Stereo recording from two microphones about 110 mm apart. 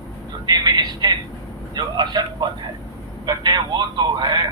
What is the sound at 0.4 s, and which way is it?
A man's voice, 35° right (ahead or behind).